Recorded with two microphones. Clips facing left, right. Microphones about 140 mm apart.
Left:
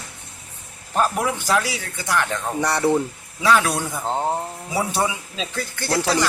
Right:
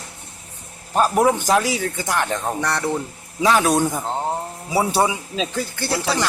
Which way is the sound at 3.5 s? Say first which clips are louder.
Right 2 dB; 40° right (ahead or behind).